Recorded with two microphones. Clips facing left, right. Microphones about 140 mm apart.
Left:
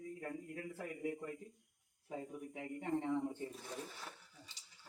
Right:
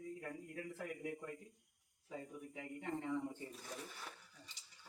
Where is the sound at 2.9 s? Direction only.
20° left (ahead or behind).